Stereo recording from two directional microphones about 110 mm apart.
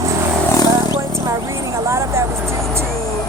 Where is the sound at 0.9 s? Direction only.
25° right (ahead or behind).